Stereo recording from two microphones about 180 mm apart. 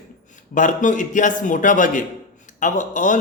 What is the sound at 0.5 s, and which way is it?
Speech, 45° left (ahead or behind).